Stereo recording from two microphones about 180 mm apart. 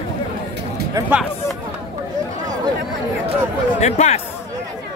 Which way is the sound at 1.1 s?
Centre (ahead or behind).